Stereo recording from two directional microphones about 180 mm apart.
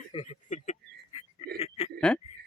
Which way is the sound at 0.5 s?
40° left (ahead or behind).